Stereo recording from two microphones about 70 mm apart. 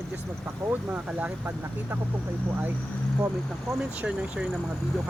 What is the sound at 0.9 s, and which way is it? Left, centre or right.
Speech, right.